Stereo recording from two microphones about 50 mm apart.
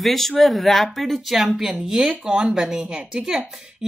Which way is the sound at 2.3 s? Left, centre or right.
Right.